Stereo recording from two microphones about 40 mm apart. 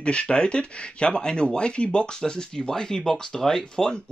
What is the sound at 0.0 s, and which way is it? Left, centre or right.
Speech, left.